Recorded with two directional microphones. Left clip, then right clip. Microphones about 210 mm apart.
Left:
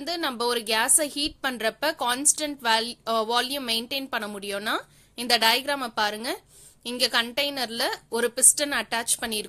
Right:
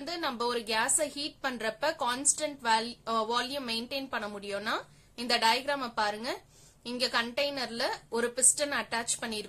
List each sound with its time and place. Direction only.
0.0 s a woman's voice: 40° left (ahead or behind)